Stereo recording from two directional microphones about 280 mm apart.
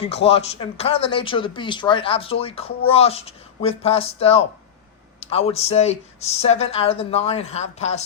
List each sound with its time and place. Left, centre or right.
0.0 s speech: left